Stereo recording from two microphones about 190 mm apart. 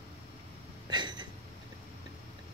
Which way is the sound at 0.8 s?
20° right (ahead or behind).